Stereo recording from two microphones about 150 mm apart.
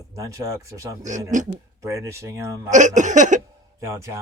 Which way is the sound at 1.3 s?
55° right (ahead or behind).